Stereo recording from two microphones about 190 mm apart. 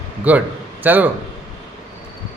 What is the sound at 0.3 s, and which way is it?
Speech, 10° right (ahead or behind).